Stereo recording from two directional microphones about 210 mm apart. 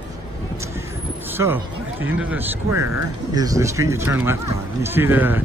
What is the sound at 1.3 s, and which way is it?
Speech, 10° right (ahead or behind).